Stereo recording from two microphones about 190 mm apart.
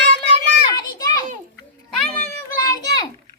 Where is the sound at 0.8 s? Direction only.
20° left (ahead or behind).